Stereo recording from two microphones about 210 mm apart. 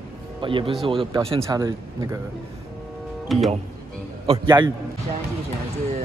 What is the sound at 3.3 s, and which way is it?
Speech, centre (ahead or behind).